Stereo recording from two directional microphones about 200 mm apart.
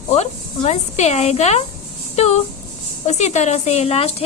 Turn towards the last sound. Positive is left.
turn(degrees=30)  # may be behind; listen again after turning